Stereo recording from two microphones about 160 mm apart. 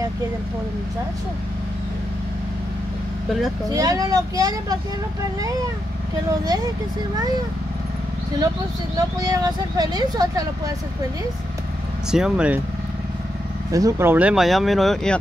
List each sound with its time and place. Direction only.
3.7 s speech: 20° right (ahead or behind)
6.4 s speech: 25° right (ahead or behind)
9.2 s speech: 25° right (ahead or behind)
12.1 s speech: 5° right (ahead or behind)
13.7 s speech: 20° right (ahead or behind); by 15.1 s centre (ahead or behind)